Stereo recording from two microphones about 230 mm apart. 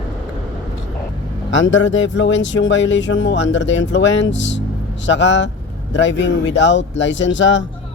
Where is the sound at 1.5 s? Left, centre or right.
Left.